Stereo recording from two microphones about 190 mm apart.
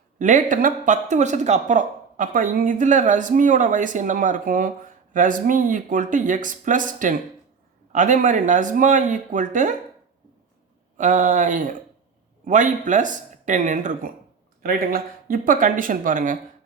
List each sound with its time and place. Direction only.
0.2 s speech: 40° right (ahead or behind)
10.9 s speech: 40° right (ahead or behind)